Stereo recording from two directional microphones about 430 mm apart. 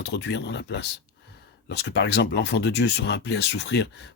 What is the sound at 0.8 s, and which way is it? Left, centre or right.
Speech, left.